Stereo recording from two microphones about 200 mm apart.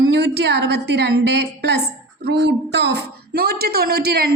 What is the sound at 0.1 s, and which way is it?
A woman's voice, 55° right (ahead or behind).